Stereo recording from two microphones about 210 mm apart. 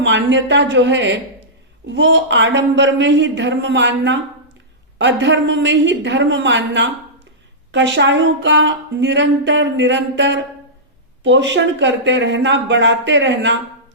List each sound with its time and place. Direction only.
0.0 s speech: 60° right (ahead or behind)